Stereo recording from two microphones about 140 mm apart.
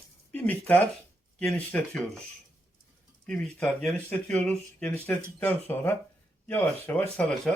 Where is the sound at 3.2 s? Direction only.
5° left (ahead or behind).